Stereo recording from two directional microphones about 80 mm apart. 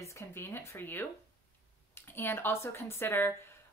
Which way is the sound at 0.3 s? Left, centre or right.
Left.